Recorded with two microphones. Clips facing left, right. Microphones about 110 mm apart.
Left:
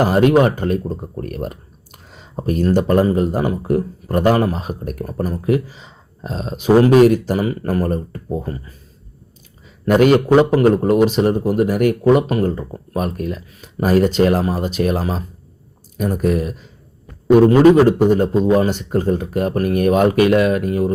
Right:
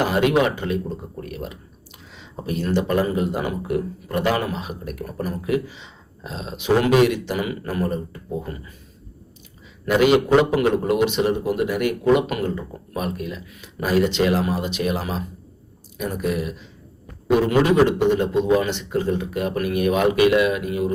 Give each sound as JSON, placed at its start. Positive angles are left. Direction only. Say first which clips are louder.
{"t": 0.0, "sound": "speech", "louder": "left 5 dB", "side_deg": 40}
{"t": 9.8, "sound": "speech", "louder": "left 4 dB", "side_deg": 45}